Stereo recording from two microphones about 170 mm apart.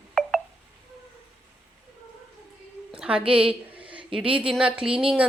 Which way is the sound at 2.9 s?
5° right (ahead or behind).